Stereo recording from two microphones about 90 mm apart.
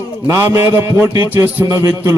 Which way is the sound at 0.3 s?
35° right (ahead or behind).